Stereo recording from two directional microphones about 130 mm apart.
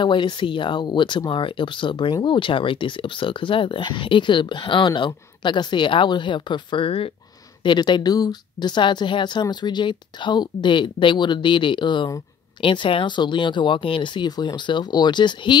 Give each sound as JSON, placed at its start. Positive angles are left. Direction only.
{"t": 0.0, "sound": "speech", "side_deg": 40}